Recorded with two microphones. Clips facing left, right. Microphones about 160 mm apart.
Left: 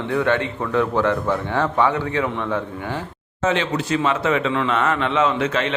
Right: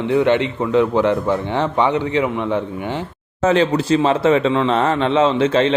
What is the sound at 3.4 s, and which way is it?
Speech, 35° right (ahead or behind).